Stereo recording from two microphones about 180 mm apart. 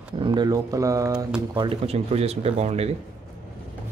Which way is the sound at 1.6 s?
35° right (ahead or behind).